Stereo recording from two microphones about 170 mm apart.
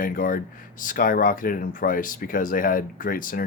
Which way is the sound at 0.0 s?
55° left (ahead or behind).